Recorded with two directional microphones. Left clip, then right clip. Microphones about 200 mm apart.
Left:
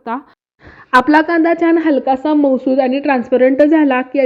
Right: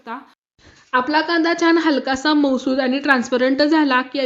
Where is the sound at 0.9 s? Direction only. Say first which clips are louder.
Left 7 dB; 35° left (ahead or behind).